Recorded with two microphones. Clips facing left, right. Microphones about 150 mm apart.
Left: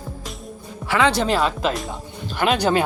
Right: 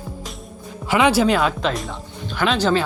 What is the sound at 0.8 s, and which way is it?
Speech, 20° right (ahead or behind).